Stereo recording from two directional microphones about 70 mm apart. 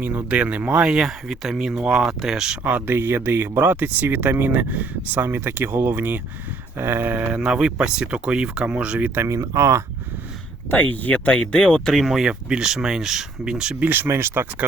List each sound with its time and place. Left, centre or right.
0.3 s speech: centre
2.6 s speech: right
6.7 s speech: right
7.4 s speech: centre
9.2 s speech: right
10.7 s speech: left; by 14.7 s right